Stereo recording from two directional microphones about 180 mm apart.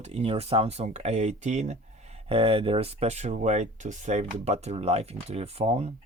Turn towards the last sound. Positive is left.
turn(degrees=-35)  # may be behind; listen again after turning